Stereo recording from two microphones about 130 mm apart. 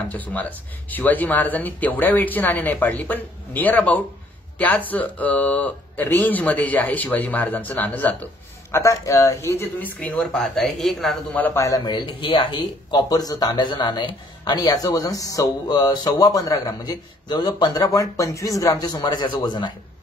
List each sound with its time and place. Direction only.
0.1 s speech: 10° left (ahead or behind)
8.7 s speech: 25° left (ahead or behind); by 11.1 s centre (ahead or behind)
11.3 s speech: 15° left (ahead or behind)
11.6 s speech: 30° left (ahead or behind)